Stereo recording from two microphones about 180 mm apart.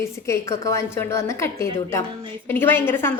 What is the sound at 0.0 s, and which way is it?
A woman's voice, 15° left (ahead or behind).